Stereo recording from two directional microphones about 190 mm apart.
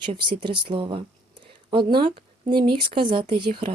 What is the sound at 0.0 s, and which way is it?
Speech, 25° right (ahead or behind).